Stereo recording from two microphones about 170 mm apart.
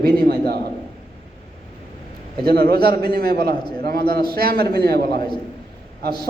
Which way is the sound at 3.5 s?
25° left (ahead or behind).